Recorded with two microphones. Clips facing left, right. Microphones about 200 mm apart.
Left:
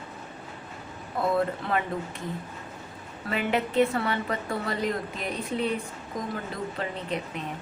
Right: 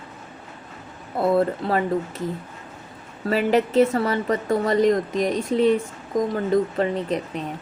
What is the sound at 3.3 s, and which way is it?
A woman's voice, 35° right (ahead or behind).